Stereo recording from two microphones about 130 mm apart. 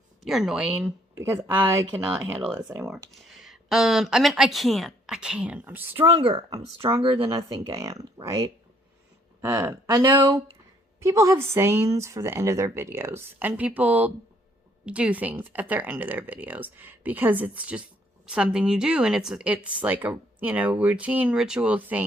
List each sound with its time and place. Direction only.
0.2 s a woman's voice: centre (ahead or behind)
1.1 s speech: 20° right (ahead or behind)
2.6 s speech: 25° right (ahead or behind)
3.2 s speech: centre (ahead or behind)
7.0 s a woman's voice: 35° right (ahead or behind); by 22.0 s 15° right (ahead or behind)